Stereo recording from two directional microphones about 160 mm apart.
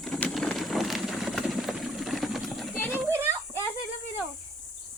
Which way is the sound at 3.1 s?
15° right (ahead or behind).